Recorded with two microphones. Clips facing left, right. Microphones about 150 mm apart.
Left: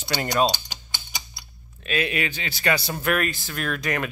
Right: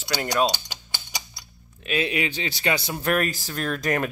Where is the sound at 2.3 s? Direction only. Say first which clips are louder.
Left 1 dB; 30° right (ahead or behind).